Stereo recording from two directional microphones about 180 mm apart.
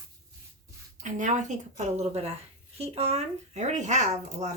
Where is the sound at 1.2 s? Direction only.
45° right (ahead or behind).